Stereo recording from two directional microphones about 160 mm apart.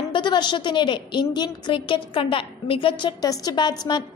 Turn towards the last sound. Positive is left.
turn(degrees=30)  # may be behind; listen again after turning